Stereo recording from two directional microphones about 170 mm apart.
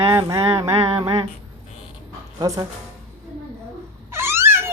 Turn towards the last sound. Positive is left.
turn(degrees=-15)  # may be behind; listen again after turning